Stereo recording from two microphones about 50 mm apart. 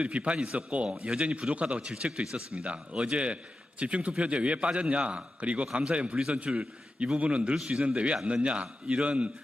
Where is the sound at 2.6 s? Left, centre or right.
Right.